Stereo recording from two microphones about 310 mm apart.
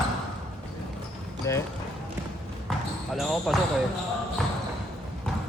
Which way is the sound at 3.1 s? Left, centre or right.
Centre.